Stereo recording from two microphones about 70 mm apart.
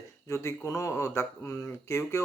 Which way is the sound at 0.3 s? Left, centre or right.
Left.